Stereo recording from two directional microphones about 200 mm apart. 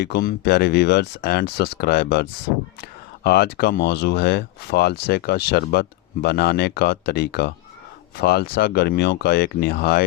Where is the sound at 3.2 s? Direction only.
55° left (ahead or behind).